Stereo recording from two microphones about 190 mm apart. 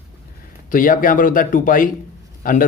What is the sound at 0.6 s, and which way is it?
Speech, 45° left (ahead or behind).